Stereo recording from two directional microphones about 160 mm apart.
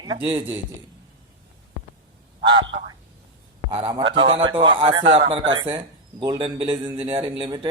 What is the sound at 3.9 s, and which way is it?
A man's voice, 30° right (ahead or behind).